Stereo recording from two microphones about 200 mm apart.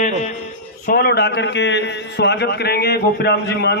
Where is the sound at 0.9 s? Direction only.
50° left (ahead or behind).